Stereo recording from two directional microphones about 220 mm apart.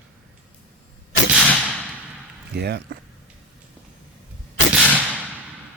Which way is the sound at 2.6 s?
50° right (ahead or behind).